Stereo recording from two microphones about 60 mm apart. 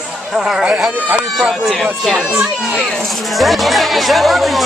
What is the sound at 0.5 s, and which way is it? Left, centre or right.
Speech, centre.